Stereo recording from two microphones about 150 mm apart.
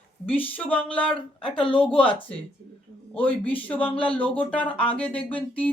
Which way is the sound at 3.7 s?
10° left (ahead or behind).